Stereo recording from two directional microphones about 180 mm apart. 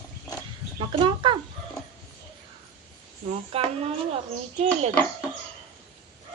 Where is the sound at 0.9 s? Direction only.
25° right (ahead or behind).